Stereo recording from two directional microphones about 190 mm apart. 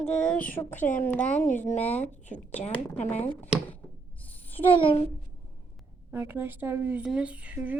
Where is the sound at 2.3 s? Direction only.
35° left (ahead or behind).